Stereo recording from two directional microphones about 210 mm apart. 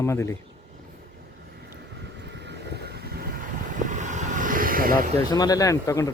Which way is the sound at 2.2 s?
55° right (ahead or behind).